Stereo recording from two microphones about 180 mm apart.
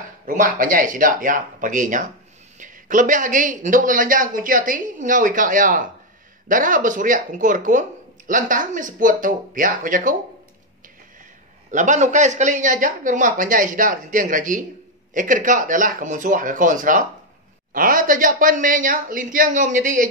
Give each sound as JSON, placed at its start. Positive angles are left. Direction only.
{"t": 0.3, "sound": "speech", "side_deg": -50}
{"t": 11.7, "sound": "speech", "side_deg": -45}